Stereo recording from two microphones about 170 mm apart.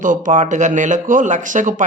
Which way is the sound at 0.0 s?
50° right (ahead or behind).